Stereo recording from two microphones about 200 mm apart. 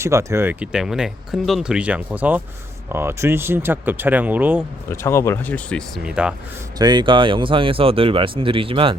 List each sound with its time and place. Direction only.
0.0 s speech: 15° right (ahead or behind)
4.9 s speech: 15° left (ahead or behind); by 6.3 s 5° right (ahead or behind)
6.7 s speech: 20° right (ahead or behind)